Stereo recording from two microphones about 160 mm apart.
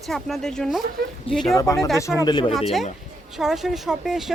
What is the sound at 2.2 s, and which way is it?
Speech, 30° left (ahead or behind).